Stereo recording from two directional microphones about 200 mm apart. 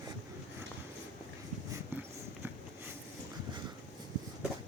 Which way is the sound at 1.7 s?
10° right (ahead or behind).